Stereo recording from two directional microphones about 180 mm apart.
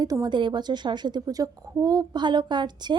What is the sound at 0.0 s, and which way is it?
A woman's voice, 20° right (ahead or behind).